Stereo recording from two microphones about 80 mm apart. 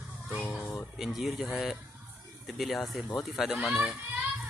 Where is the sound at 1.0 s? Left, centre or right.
Centre.